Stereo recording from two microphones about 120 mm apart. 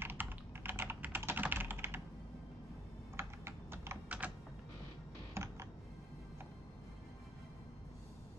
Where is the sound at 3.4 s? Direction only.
20° right (ahead or behind).